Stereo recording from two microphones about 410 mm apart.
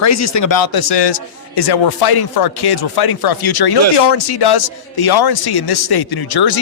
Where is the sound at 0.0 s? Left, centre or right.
Left.